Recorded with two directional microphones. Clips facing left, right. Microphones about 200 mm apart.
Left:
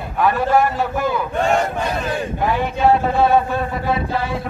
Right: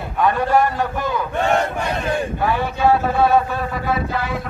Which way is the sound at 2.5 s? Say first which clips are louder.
Left 2 dB; 20° left (ahead or behind).